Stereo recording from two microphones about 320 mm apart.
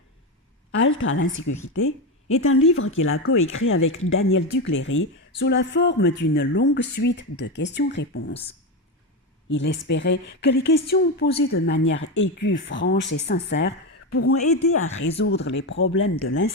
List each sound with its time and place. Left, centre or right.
0.8 s speech: left
9.5 s speech: left